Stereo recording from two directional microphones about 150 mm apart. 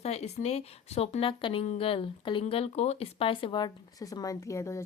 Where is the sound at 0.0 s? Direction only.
45° left (ahead or behind).